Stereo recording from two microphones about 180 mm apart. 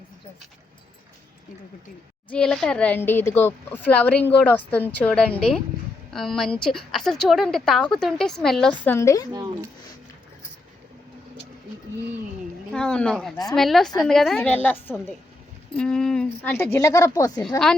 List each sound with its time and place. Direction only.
2.3 s a woman's voice: 5° left (ahead or behind)
9.3 s speech: 20° right (ahead or behind)
12.7 s a woman's voice: 5° left (ahead or behind)